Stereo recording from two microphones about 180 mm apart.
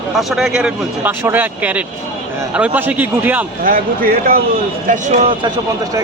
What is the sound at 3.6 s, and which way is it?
Speech, 50° right (ahead or behind).